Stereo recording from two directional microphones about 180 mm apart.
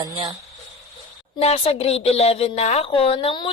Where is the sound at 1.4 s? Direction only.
35° left (ahead or behind).